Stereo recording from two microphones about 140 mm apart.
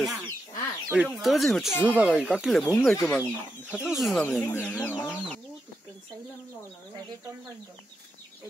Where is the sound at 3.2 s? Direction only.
10° right (ahead or behind).